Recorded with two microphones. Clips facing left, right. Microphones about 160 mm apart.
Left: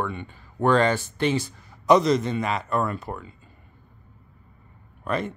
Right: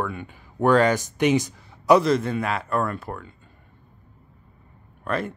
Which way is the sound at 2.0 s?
5° right (ahead or behind).